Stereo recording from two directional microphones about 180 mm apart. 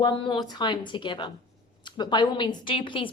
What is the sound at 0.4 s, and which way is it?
A woman's voice, 25° left (ahead or behind).